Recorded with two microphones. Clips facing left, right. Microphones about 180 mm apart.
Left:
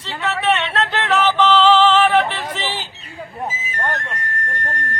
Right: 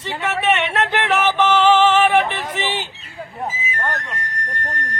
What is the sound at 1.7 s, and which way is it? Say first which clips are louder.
Music: even; 20° right (ahead or behind).